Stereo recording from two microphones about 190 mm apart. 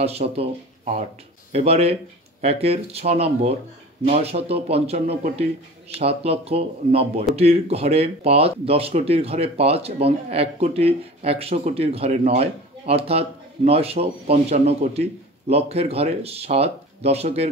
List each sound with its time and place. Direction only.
0.0 s speech: 35° right (ahead or behind)